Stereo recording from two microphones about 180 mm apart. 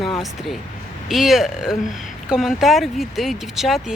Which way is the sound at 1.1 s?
Centre (ahead or behind).